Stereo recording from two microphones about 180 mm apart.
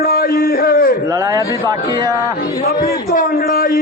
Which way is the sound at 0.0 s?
55° left (ahead or behind).